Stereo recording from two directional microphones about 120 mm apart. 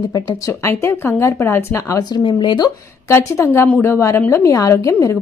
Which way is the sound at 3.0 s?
20° left (ahead or behind).